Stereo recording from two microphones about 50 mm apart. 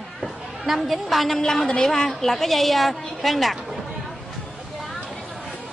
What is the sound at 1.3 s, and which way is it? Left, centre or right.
A woman's voice, centre.